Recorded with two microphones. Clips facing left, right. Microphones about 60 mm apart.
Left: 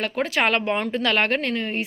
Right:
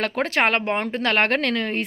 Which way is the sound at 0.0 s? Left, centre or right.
Right.